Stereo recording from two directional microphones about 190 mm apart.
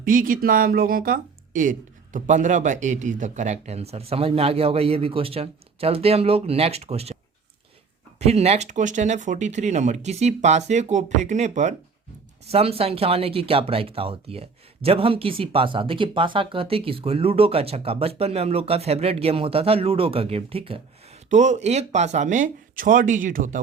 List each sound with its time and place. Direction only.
0.0 s speech: 45° right (ahead or behind)
8.2 s speech: 35° right (ahead or behind)